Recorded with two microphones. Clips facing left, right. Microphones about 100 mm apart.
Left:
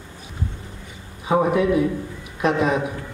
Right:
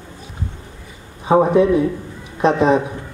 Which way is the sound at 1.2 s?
30° right (ahead or behind).